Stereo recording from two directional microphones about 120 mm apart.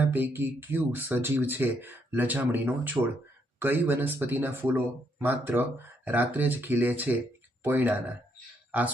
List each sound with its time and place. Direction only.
0.0 s speech: 15° right (ahead or behind)